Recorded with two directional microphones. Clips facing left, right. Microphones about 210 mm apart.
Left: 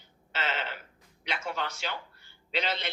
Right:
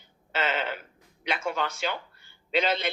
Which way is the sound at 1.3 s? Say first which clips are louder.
Right 5 dB; 50° right (ahead or behind).